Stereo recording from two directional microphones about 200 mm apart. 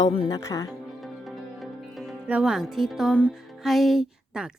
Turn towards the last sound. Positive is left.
turn(degrees=-5)  # may be behind; listen again after turning